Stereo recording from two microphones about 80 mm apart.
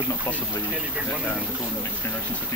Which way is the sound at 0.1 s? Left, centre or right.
Left.